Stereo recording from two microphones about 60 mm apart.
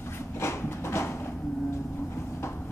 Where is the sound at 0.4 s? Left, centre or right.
Left.